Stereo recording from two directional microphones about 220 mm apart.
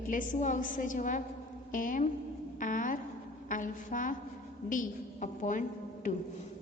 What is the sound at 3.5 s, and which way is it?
A woman's voice, 35° left (ahead or behind).